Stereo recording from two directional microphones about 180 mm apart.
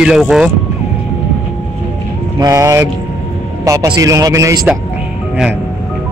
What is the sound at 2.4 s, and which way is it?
A man's voice, 15° right (ahead or behind).